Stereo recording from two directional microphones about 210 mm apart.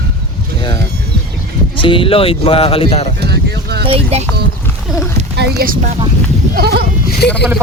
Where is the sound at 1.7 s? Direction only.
25° left (ahead or behind).